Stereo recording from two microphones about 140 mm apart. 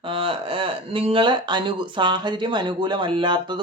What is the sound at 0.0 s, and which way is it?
Speech, 40° right (ahead or behind).